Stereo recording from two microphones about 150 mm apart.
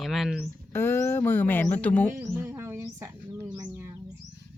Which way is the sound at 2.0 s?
15° right (ahead or behind).